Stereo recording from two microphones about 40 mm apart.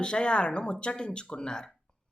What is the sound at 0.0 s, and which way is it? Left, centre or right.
A woman's voice, left.